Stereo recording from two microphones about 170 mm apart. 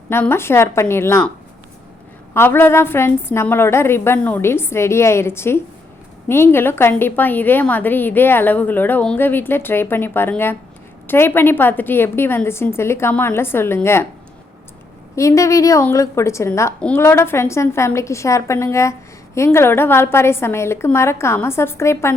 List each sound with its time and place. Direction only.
0.1 s a woman's voice: 15° left (ahead or behind)
2.3 s a woman's voice: 15° left (ahead or behind)
15.1 s a woman's voice: 15° left (ahead or behind)